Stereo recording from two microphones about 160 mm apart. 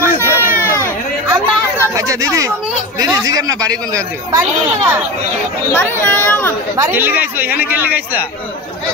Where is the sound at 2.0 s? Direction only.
20° right (ahead or behind).